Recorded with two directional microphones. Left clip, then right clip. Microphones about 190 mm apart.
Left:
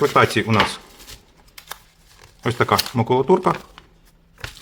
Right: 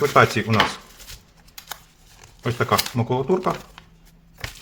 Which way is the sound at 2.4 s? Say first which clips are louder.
Left 3 dB; 25° left (ahead or behind).